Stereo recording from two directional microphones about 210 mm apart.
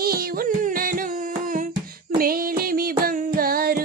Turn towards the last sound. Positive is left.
turn(degrees=-45)  # may be behind; listen again after turning